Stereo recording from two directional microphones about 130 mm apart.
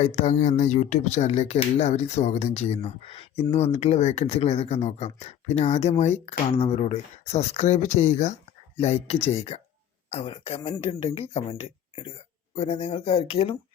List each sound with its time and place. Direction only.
0.0 s speech: 60° left (ahead or behind)